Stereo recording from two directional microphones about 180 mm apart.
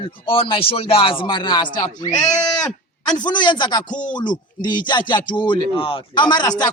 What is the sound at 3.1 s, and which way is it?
Speech, 25° left (ahead or behind).